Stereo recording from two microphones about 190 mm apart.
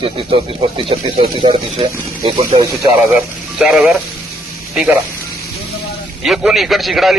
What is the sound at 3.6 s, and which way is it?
Speech, 5° right (ahead or behind).